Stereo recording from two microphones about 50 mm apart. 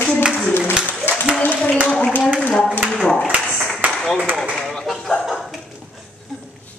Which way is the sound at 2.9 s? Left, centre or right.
Left.